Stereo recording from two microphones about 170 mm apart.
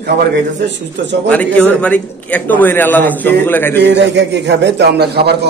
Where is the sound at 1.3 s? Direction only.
10° left (ahead or behind).